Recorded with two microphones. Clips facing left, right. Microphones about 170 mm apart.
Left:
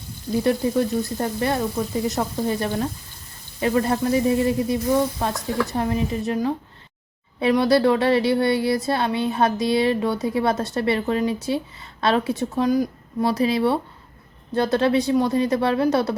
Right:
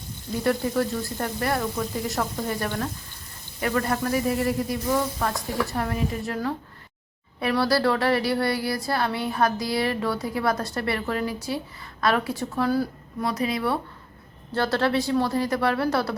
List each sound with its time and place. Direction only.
0.4 s speech: 20° left (ahead or behind)
13.2 s speech: 30° left (ahead or behind)